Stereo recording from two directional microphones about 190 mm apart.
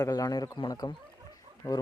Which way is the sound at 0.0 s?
20° left (ahead or behind).